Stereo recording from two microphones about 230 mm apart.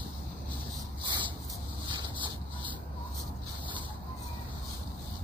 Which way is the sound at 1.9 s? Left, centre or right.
Centre.